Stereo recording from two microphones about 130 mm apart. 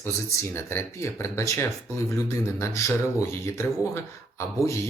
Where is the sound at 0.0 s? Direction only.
20° left (ahead or behind).